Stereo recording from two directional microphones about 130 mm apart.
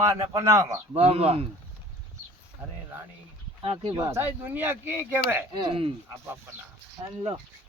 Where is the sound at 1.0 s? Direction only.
55° right (ahead or behind).